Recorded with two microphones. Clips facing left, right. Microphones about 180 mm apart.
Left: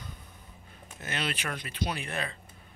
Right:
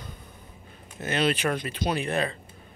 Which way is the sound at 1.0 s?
30° right (ahead or behind).